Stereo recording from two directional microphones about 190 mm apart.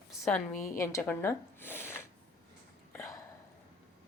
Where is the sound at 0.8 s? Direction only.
15° left (ahead or behind).